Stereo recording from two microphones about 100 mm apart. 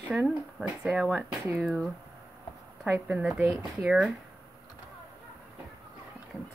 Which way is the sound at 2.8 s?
20° right (ahead or behind).